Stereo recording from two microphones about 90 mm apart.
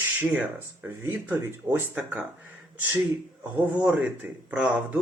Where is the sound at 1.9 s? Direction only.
15° right (ahead or behind).